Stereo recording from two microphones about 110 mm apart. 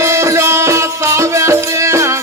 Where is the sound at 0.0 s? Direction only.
25° right (ahead or behind).